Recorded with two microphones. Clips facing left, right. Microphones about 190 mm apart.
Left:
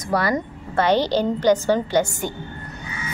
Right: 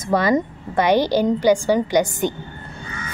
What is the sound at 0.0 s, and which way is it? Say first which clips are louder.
A woman's voice: right 4 dB; 20° right (ahead or behind).